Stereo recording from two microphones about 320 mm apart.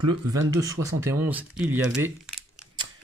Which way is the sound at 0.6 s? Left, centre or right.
Centre.